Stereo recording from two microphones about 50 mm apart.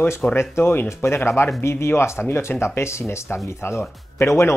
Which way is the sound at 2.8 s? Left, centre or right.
Left.